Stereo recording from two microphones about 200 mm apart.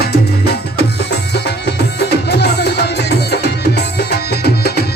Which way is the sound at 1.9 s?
55° left (ahead or behind).